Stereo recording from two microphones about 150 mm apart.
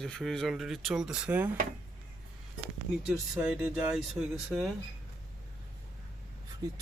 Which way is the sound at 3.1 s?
5° right (ahead or behind).